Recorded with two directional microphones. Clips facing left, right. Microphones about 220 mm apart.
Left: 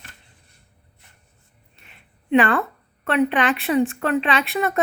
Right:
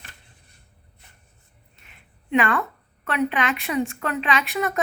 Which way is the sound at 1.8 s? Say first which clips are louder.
Left 3 dB; 30° left (ahead or behind).